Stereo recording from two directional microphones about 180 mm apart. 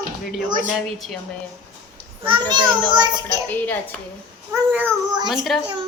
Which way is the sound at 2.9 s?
25° right (ahead or behind).